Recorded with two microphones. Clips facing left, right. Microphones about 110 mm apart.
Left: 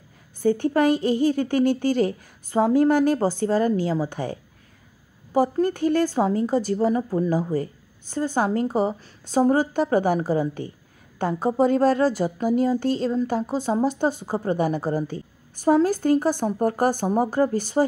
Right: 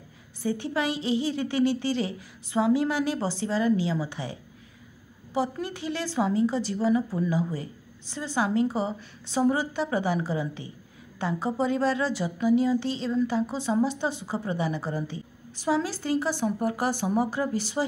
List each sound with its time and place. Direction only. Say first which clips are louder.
0.4 s a woman's voice: left 8 dB; 50° left (ahead or behind)